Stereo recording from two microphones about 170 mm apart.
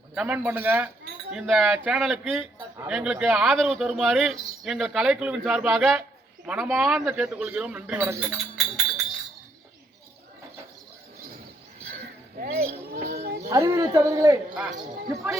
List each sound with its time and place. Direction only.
0.1 s a man's voice: 5° right (ahead or behind)
2.6 s speech: 10° right (ahead or behind)
12.4 s a sound: 65° right (ahead or behind)
13.5 s a man's voice: 20° right (ahead or behind)
14.5 s speech: 5° right (ahead or behind)
15.1 s a man's voice: 15° right (ahead or behind)